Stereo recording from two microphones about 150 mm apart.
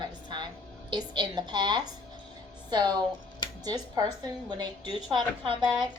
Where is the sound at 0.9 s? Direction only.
30° right (ahead or behind).